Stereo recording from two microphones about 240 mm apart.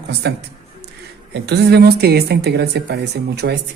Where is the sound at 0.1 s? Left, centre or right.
Right.